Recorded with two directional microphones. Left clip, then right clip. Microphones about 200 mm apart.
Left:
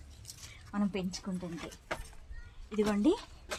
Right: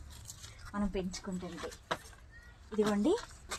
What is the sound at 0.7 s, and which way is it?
Speech, 45° left (ahead or behind).